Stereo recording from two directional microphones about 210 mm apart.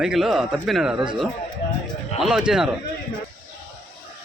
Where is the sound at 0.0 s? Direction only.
Centre (ahead or behind).